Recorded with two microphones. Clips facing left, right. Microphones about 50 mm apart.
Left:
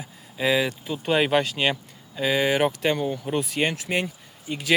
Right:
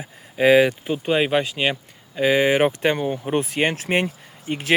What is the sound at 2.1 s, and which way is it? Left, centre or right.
Speech, right.